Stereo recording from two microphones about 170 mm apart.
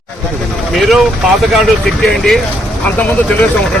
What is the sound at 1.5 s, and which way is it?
Speech, centre (ahead or behind).